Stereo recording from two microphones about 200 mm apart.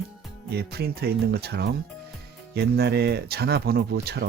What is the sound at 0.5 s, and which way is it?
Speech, 55° right (ahead or behind).